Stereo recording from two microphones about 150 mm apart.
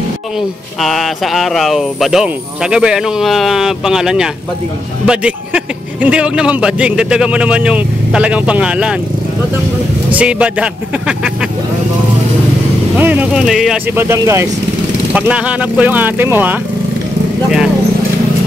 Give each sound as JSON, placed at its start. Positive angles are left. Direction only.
{"t": 0.7, "sound": "a man's voice", "side_deg": 0}
{"t": 10.1, "sound": "a man's voice", "side_deg": -10}
{"t": 12.9, "sound": "speech", "side_deg": -10}
{"t": 13.9, "sound": "speech", "side_deg": -20}
{"t": 15.1, "sound": "a man's voice", "side_deg": -10}